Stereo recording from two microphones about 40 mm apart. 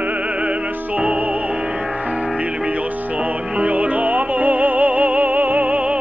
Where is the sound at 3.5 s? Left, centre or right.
Right.